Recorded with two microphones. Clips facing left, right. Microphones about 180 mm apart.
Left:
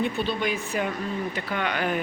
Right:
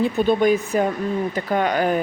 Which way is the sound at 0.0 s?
45° right (ahead or behind).